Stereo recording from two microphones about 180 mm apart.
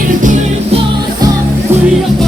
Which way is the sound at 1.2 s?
20° right (ahead or behind).